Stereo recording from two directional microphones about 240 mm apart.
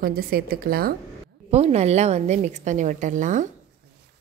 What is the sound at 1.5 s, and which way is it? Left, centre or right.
A woman's voice, right.